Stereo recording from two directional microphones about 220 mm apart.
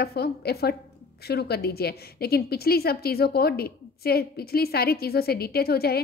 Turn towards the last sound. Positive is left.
turn(degrees=45)  # may be behind; listen again after turning